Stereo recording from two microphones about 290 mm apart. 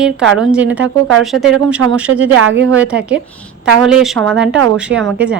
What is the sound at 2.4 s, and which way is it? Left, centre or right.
Speech, right.